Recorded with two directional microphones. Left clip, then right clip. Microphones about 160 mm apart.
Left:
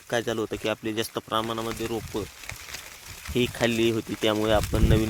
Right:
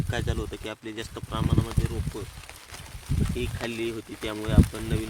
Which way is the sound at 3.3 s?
60° left (ahead or behind).